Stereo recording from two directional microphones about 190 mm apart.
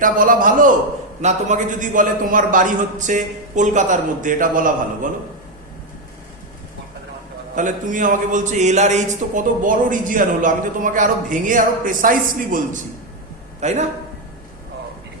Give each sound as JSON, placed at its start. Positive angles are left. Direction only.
{"t": 0.0, "sound": "a man's voice", "side_deg": -45}
{"t": 7.5, "sound": "a man's voice", "side_deg": -45}